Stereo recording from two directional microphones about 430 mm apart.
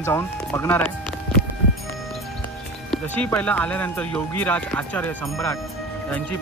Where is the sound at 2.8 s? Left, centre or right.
Centre.